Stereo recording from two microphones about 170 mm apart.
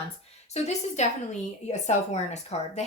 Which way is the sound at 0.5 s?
40° left (ahead or behind).